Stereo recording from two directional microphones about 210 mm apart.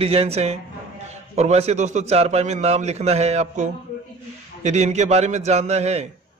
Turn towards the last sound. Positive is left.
turn(degrees=-30)  # may be behind; listen again after turning